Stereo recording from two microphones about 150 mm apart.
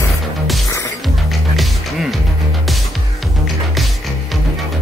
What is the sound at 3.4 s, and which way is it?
Music, centre (ahead or behind).